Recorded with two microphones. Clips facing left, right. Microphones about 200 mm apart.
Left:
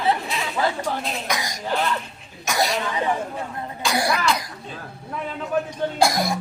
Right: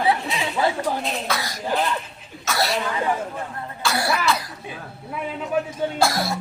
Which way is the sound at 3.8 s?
15° left (ahead or behind).